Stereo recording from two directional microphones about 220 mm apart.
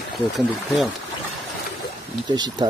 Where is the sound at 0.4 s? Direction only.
Centre (ahead or behind).